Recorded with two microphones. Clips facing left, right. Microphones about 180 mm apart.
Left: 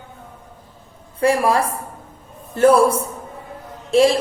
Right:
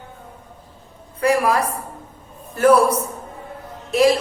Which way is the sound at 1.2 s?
30° left (ahead or behind).